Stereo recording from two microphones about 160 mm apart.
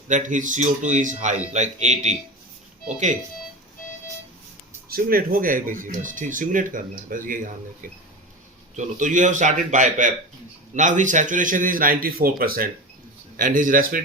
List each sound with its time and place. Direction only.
0.1 s a man's voice: 50° right (ahead or behind)
4.9 s a man's voice: 65° right (ahead or behind)